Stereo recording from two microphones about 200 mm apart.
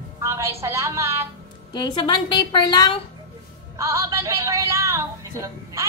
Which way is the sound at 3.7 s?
15° right (ahead or behind).